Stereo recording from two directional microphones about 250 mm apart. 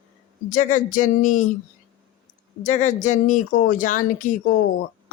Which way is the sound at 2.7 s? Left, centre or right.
Left.